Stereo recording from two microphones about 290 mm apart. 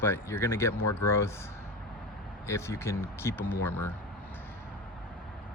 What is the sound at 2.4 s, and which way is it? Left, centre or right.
Speech, centre.